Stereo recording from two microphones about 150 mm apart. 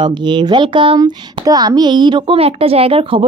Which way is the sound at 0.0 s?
30° right (ahead or behind).